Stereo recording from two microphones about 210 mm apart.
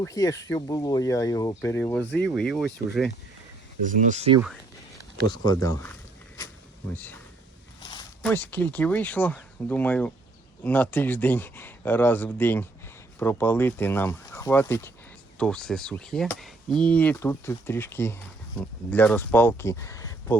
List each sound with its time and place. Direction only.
0.0 s speech: 15° left (ahead or behind); by 3.1 s centre (ahead or behind)
3.8 s speech: 35° right (ahead or behind)
5.5 s speech: 15° left (ahead or behind)
6.9 s speech: 10° left (ahead or behind)
7.8 s a sound: 20° left (ahead or behind)
8.2 s speech: 10° left (ahead or behind)